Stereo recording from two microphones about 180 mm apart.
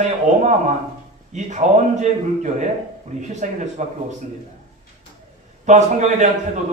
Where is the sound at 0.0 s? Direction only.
40° right (ahead or behind).